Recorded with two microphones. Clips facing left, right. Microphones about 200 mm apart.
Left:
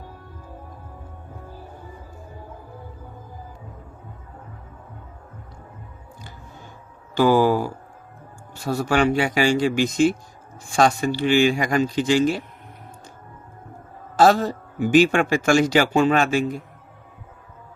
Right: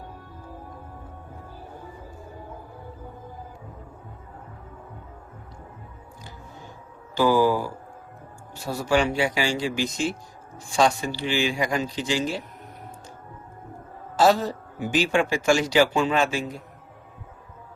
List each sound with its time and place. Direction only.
7.2 s speech: 55° left (ahead or behind)
8.7 s speech: 55° left (ahead or behind)
14.2 s a man's voice: 50° left (ahead or behind)